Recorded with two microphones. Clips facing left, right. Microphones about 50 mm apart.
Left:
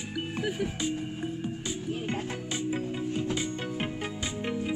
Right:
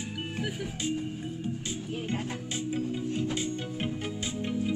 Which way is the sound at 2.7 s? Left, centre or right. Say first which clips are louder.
Right 2 dB; left.